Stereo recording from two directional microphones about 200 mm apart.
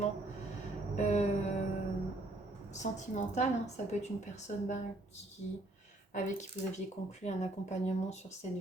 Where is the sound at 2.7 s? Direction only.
35° left (ahead or behind).